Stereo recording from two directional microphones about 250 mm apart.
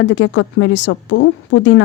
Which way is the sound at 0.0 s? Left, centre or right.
Left.